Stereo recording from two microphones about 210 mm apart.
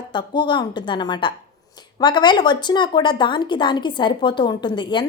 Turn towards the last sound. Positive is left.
turn(degrees=20)  # may be behind; listen again after turning